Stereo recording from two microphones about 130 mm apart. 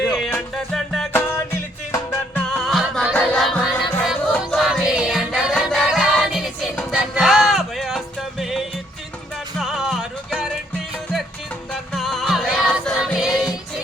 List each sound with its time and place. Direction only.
0.3 s music: 5° left (ahead or behind)
1.9 s music: 20° left (ahead or behind)
2.5 s music: 5° left (ahead or behind)
11.7 s music: centre (ahead or behind)